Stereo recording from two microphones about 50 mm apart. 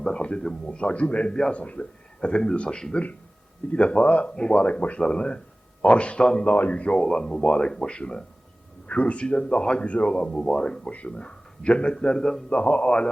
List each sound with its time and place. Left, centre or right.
0.0 s speech: left
1.5 s speech: left
6.4 s speech: left; by 10.8 s centre
10.8 s speech: left
12.5 s speech: left